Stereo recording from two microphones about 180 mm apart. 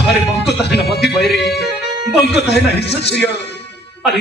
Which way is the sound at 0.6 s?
65° left (ahead or behind).